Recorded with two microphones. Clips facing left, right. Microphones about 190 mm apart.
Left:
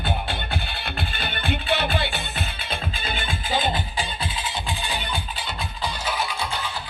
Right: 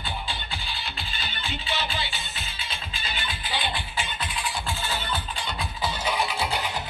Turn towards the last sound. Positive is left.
turn(degrees=15)  # may be behind; listen again after turning